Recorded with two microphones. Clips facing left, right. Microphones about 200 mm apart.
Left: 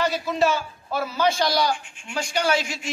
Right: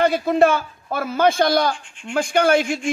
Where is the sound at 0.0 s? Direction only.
55° right (ahead or behind).